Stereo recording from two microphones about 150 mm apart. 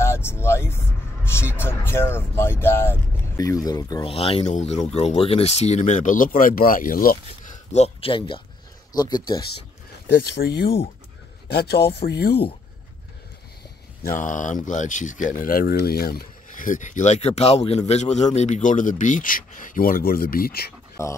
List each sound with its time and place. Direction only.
0.0 s speech: 15° left (ahead or behind)
4.1 s speech: 40° left (ahead or behind); by 7.2 s 70° left (ahead or behind)
7.7 s speech: 45° left (ahead or behind); by 9.4 s 25° left (ahead or behind)
10.1 s speech: 90° left
14.0 s speech: 60° left (ahead or behind)
15.8 s speech: 90° left
21.0 s speech: 20° left (ahead or behind)